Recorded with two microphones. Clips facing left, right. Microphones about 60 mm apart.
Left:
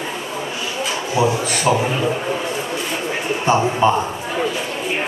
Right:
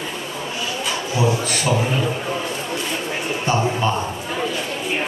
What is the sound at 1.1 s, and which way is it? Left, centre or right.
Speech, centre.